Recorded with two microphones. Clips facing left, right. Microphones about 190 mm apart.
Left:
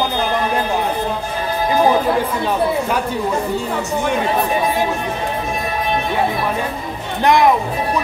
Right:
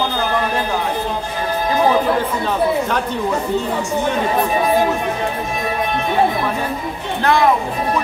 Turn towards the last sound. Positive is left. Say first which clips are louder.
# left 2 dB
turn(degrees=15)  # may be behind; listen again after turning